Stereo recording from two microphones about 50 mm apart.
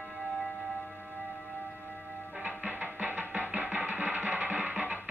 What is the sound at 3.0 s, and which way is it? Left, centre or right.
Music, right.